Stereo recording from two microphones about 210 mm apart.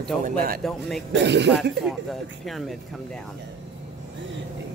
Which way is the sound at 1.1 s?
55° right (ahead or behind).